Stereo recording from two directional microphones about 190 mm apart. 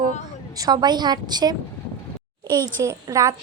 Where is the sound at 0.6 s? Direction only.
20° right (ahead or behind).